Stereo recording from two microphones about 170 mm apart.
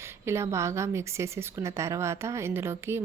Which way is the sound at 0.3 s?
15° right (ahead or behind).